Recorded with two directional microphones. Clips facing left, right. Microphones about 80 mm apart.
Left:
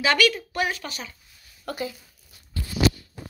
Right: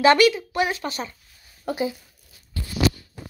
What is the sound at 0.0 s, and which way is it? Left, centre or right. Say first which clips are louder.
Speech: right 6 dB; right.